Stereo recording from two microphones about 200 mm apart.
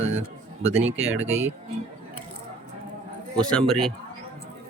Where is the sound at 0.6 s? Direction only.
30° right (ahead or behind).